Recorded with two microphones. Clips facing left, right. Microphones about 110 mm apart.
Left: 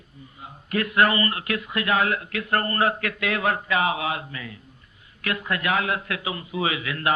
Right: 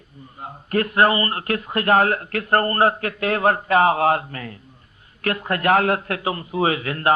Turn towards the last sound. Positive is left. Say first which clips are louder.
# right 5 dB
turn(degrees=-40)  # may be behind; listen again after turning